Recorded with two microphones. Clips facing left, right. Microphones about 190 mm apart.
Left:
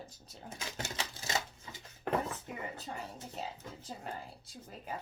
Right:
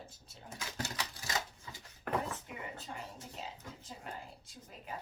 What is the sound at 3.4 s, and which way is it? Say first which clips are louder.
Speech: left 5 dB; 40° left (ahead or behind).